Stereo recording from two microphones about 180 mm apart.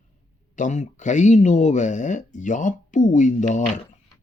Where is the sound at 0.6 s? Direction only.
40° left (ahead or behind).